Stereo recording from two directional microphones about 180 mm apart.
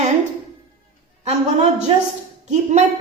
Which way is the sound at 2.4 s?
40° right (ahead or behind).